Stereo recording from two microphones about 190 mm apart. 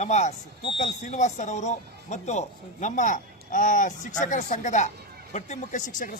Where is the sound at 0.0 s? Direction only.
35° left (ahead or behind).